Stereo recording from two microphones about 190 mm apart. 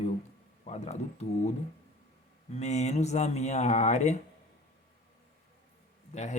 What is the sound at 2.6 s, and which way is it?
Speech, 35° left (ahead or behind).